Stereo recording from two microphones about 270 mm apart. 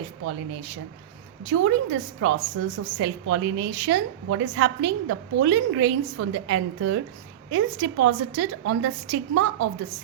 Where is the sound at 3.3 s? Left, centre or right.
Right.